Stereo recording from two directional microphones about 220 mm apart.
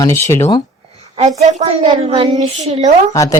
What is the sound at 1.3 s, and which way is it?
A woman's voice, 30° right (ahead or behind).